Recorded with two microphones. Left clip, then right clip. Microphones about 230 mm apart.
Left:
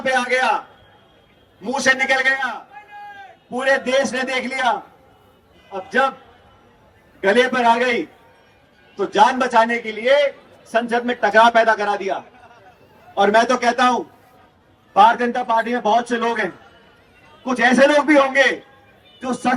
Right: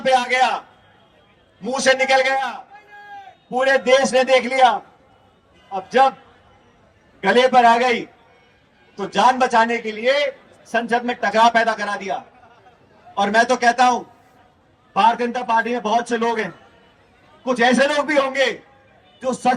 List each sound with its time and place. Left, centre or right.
0.0 s a man's voice: right
1.6 s a man's voice: right
5.7 s a man's voice: right
7.2 s a man's voice: right